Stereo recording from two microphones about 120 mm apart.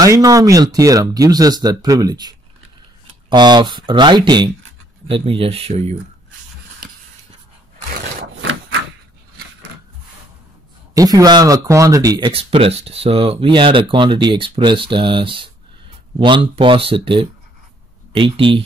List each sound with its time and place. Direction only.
0.0 s speech: 30° right (ahead or behind); by 5.9 s 60° right (ahead or behind)
11.0 s speech: 30° right (ahead or behind)
12.3 s speech: 50° right (ahead or behind)